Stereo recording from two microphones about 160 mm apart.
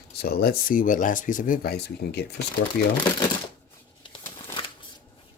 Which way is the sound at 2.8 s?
70° left (ahead or behind).